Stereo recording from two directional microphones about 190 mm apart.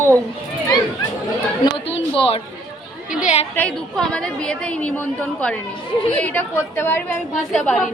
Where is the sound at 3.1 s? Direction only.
40° left (ahead or behind).